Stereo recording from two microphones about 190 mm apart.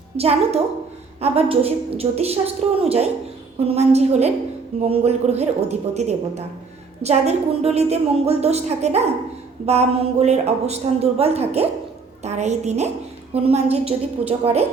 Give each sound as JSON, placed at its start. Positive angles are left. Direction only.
{"t": 0.2, "sound": "a woman's voice", "side_deg": -35}